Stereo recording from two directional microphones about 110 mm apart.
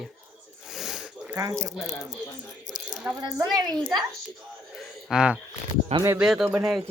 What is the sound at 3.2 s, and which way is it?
Speech, 35° right (ahead or behind).